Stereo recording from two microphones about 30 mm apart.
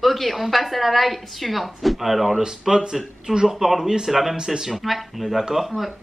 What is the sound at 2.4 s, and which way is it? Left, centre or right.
A woman's voice, right.